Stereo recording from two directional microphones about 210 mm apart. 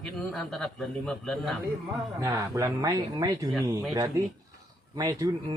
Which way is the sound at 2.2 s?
15° right (ahead or behind).